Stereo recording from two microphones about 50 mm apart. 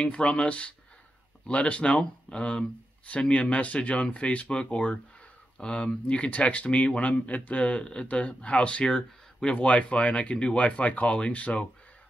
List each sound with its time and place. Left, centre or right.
0.0 s speech: centre